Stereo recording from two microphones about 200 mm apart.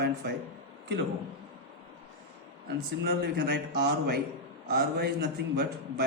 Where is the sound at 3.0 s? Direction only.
55° right (ahead or behind).